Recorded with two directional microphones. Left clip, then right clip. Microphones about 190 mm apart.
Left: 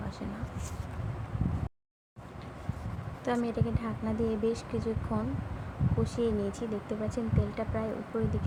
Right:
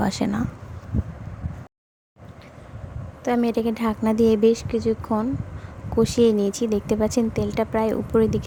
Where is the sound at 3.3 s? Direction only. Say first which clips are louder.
Right 10 dB; 40° right (ahead or behind).